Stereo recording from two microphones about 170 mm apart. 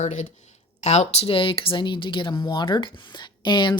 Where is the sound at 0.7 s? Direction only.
40° left (ahead or behind).